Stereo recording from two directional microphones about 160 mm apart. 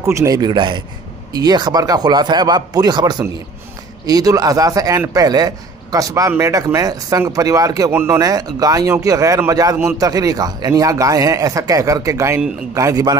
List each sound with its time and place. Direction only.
0.0 s a man's voice: 20° right (ahead or behind)